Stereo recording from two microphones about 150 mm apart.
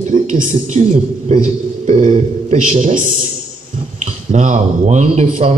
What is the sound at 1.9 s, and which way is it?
A man's voice, 45° right (ahead or behind).